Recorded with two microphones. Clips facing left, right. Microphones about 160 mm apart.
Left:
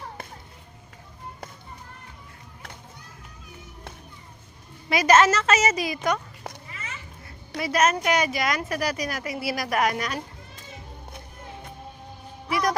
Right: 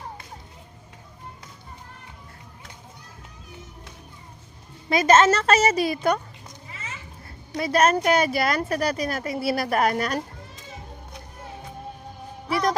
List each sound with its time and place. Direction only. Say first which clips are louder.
4.9 s a woman's voice: right 1 dB; 25° right (ahead or behind)
6.5 s children playing: left 7 dB; 65° left (ahead or behind)
7.6 s a woman's voice: right 3 dB; 30° right (ahead or behind)
12.5 s music: right 1 dB; 30° right (ahead or behind)